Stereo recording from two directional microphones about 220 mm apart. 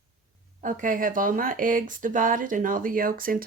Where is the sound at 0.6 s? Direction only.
35° right (ahead or behind).